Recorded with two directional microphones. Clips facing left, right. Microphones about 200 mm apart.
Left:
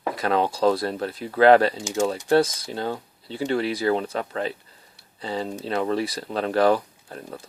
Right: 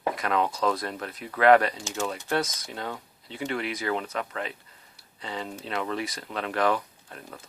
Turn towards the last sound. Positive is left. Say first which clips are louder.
# left 7 dB
turn(degrees=35)  # may be behind; listen again after turning